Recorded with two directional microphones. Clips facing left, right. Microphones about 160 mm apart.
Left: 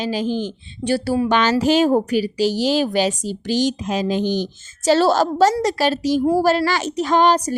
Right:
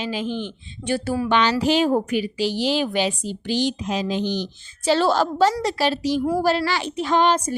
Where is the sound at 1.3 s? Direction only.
45° left (ahead or behind).